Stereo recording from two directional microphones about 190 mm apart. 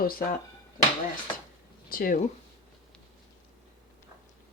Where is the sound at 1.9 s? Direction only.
45° left (ahead or behind).